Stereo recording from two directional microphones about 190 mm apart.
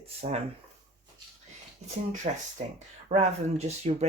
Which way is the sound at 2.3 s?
45° right (ahead or behind).